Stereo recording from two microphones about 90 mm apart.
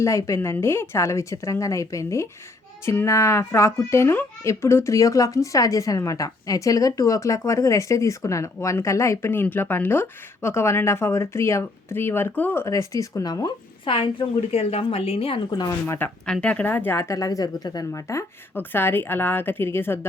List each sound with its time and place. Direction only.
0.0 s a woman's voice: 30° left (ahead or behind)
12.6 s speech: 35° left (ahead or behind)
13.8 s a woman's voice: 75° left (ahead or behind)
15.4 s speech: 50° left (ahead or behind)
15.9 s a woman's voice: 25° left (ahead or behind)
16.2 s speech: 10° left (ahead or behind)
16.7 s speech: 30° left (ahead or behind); by 18.0 s 45° left (ahead or behind)
18.5 s a woman's voice: 25° left (ahead or behind)